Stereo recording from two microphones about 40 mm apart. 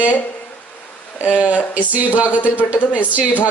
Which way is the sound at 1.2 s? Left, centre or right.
Right.